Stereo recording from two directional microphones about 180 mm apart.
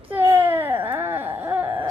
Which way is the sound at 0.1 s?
10° right (ahead or behind).